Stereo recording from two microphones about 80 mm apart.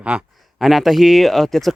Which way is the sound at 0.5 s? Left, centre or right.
Centre.